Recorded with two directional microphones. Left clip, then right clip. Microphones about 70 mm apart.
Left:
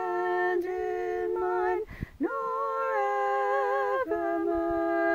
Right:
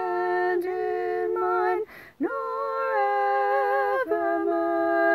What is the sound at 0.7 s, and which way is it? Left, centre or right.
Music, left.